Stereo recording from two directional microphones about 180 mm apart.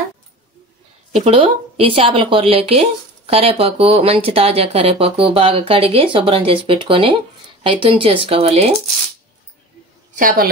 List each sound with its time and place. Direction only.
1.1 s a woman's voice: 30° right (ahead or behind)
10.1 s a woman's voice: 50° right (ahead or behind)